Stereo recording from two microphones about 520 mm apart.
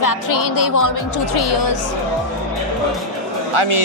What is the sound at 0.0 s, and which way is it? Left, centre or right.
A woman's voice, left.